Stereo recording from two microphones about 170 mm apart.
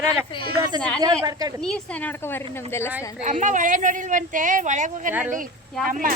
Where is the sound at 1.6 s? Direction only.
5° left (ahead or behind).